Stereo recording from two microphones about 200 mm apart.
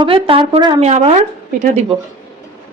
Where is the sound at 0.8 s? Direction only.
35° right (ahead or behind).